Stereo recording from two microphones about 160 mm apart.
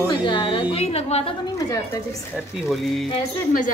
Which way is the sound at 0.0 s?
30° left (ahead or behind).